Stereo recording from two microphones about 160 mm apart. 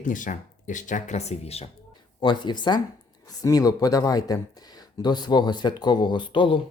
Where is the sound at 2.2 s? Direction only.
30° left (ahead or behind).